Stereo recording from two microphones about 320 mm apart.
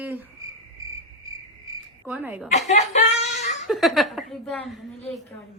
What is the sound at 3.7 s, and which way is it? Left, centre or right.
Speech, centre.